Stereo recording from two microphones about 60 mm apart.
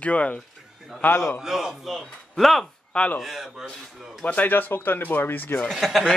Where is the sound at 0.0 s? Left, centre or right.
Left.